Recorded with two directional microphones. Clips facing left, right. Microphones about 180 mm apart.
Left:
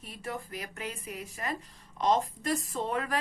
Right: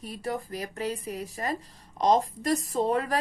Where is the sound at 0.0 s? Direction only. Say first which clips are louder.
Right 6 dB; 35° right (ahead or behind).